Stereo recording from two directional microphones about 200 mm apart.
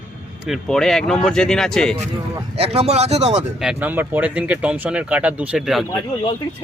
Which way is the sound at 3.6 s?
5° right (ahead or behind).